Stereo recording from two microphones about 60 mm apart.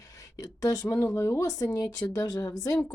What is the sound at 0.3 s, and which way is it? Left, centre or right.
Speech, left.